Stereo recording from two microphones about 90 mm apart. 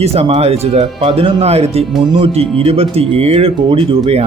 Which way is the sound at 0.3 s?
90° right.